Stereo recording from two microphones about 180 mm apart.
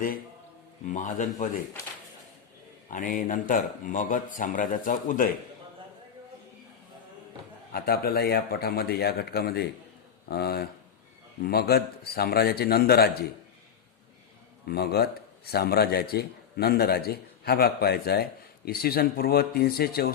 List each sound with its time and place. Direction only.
0.9 s speech: 45° left (ahead or behind)
2.9 s speech: 50° left (ahead or behind)
7.7 s a man's voice: 60° left (ahead or behind)
14.7 s a man's voice: 60° left (ahead or behind)